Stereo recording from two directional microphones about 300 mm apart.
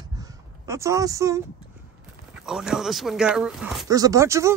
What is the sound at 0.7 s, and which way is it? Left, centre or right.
Speech, centre.